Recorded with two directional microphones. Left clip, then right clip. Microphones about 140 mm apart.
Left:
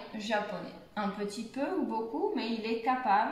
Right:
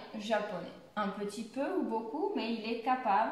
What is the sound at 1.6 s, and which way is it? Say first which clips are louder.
A woman's voice: left 1 dB; 20° right (ahead or behind).